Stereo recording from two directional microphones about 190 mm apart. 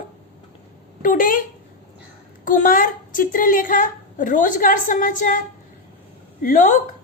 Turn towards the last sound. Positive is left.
turn(degrees=40)  # may be behind; listen again after turning